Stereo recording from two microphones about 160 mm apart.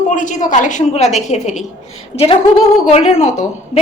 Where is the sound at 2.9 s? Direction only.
40° left (ahead or behind).